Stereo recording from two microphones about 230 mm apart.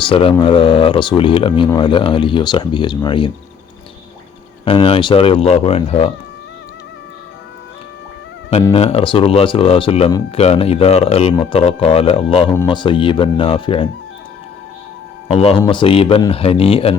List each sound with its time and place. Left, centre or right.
0.0 s speech: left
4.6 s speech: left
8.7 s speech: left
15.3 s speech: left